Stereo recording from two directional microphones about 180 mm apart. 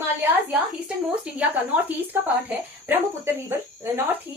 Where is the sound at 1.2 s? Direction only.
5° right (ahead or behind).